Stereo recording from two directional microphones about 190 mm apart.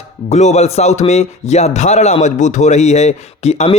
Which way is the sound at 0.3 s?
35° left (ahead or behind).